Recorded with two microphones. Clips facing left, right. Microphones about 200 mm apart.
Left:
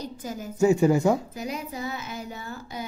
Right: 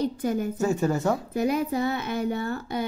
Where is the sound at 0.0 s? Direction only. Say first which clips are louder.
Right 9 dB; 60° right (ahead or behind).